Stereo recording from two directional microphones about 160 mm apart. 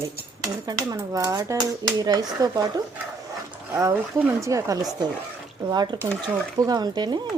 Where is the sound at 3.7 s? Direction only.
20° right (ahead or behind).